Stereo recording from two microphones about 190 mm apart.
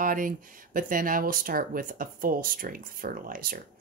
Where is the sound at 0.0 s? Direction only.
45° right (ahead or behind).